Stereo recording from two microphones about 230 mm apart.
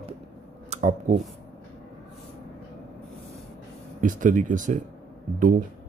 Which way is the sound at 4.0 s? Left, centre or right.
Right.